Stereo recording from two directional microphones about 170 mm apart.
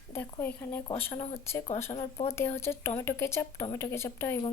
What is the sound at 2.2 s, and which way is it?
Speech, 15° left (ahead or behind).